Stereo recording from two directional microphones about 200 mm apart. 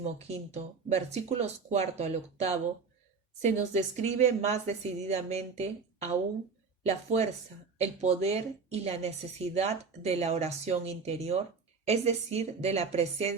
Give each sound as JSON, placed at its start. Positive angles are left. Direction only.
{"t": 0.0, "sound": "a woman's voice", "side_deg": -30}